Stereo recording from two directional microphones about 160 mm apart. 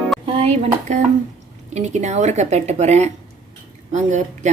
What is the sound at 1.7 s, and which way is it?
Speech, 45° right (ahead or behind).